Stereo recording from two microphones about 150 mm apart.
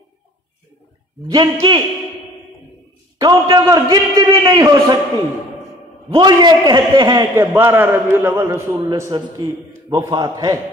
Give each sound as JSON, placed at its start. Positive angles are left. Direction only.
{"t": 1.2, "sound": "a man's voice", "side_deg": -25}
{"t": 3.2, "sound": "a man's voice", "side_deg": -30}
{"t": 6.1, "sound": "a man's voice", "side_deg": -25}
{"t": 7.3, "sound": "a man's voice", "side_deg": -15}